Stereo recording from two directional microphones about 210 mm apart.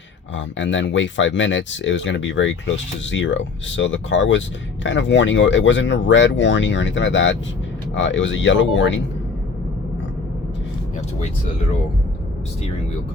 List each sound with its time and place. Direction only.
0.3 s speech: 60° left (ahead or behind)